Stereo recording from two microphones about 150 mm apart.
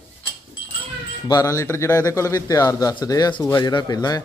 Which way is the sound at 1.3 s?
25° left (ahead or behind).